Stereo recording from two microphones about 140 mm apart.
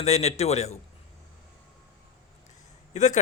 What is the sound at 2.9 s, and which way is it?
Speech, 55° left (ahead or behind).